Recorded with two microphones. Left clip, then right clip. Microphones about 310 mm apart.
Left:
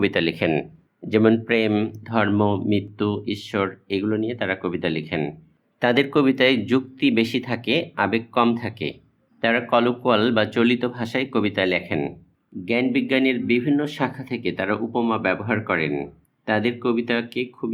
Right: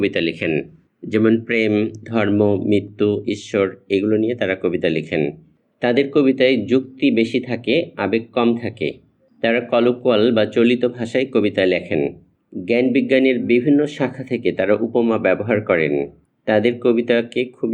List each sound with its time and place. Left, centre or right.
0.2 s speech: left